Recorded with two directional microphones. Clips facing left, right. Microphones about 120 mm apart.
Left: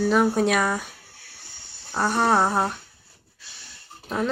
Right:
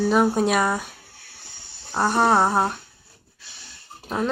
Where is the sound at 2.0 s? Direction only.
10° right (ahead or behind).